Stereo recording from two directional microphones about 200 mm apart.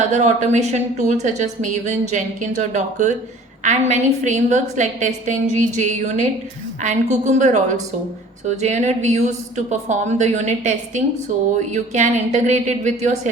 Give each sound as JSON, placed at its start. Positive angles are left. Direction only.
{"t": 0.1, "sound": "a woman's voice", "side_deg": -35}